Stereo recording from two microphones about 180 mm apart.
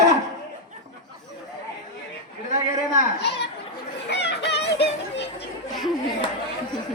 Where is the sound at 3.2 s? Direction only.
70° left (ahead or behind).